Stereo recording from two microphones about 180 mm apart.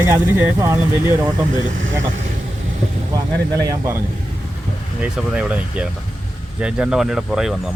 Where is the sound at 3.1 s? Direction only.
20° right (ahead or behind).